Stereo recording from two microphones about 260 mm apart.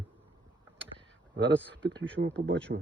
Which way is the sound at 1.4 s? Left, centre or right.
Right.